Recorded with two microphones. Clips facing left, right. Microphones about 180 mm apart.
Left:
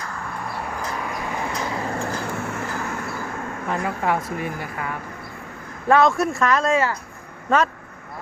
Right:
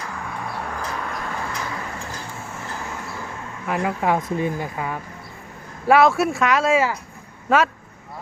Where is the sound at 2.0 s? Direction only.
70° left (ahead or behind).